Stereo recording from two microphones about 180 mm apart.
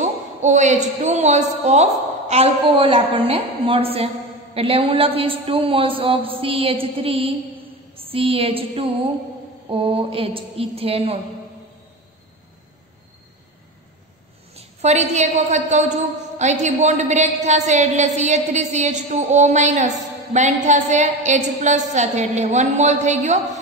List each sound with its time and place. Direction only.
0.0 s a woman's voice: 40° right (ahead or behind)
7.9 s a sound: 30° right (ahead or behind)
9.7 s a woman's voice: 30° right (ahead or behind)
14.5 s a woman's voice: 35° right (ahead or behind)